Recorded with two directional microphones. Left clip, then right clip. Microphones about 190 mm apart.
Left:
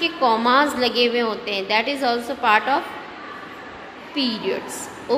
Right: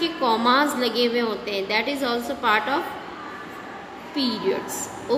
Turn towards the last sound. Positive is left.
turn(degrees=15)  # may be behind; listen again after turning